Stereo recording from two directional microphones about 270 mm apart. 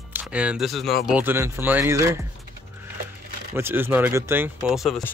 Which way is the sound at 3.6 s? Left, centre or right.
Centre.